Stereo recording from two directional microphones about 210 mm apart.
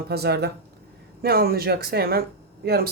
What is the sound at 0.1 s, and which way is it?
Speech, 50° right (ahead or behind).